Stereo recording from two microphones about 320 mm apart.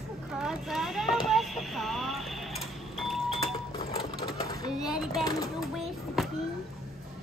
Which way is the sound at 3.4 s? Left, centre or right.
Centre.